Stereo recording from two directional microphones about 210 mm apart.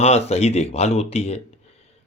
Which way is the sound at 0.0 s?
30° left (ahead or behind).